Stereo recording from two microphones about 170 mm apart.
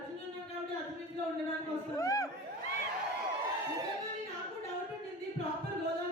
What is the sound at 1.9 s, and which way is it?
Speech, 20° left (ahead or behind).